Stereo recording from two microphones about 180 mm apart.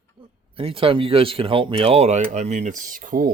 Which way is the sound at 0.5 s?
30° right (ahead or behind).